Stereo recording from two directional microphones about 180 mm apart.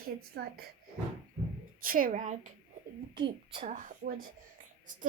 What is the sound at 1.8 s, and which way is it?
Child singing, 50° right (ahead or behind).